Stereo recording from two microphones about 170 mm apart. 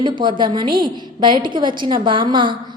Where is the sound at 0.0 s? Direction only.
25° right (ahead or behind).